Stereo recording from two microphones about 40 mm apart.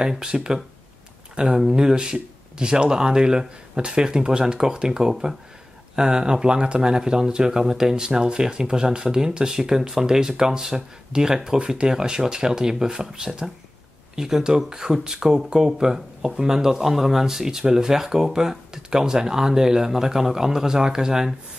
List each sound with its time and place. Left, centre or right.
0.2 s speech: centre